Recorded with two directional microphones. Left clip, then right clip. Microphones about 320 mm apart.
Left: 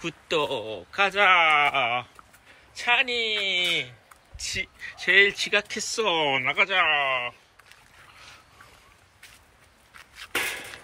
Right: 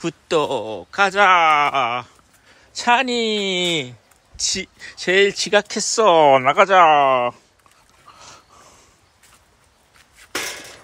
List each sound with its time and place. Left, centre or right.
0.0 s speech: centre